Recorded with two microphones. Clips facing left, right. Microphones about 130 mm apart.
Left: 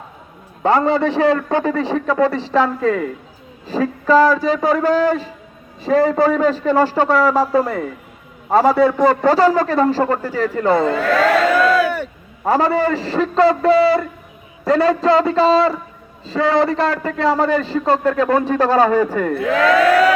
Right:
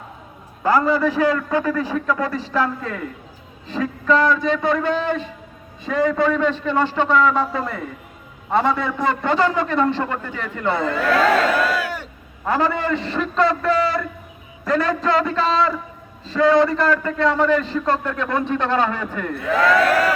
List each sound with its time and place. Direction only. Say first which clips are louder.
0.6 s a woman's voice: left 2 dB; 25° left (ahead or behind)
12.5 s a man's voice: left 5 dB; 35° left (ahead or behind)
19.3 s speech: even; 90° left